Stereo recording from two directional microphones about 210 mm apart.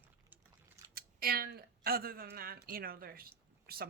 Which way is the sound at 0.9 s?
45° right (ahead or behind).